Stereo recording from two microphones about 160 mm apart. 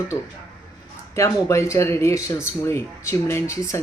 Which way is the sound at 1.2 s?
15° left (ahead or behind).